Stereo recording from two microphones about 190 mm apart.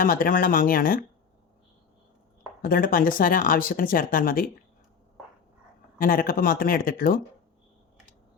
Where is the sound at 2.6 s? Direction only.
45° left (ahead or behind).